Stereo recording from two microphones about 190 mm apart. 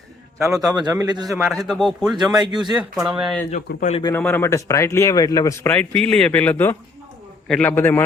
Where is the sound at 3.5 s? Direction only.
40° left (ahead or behind).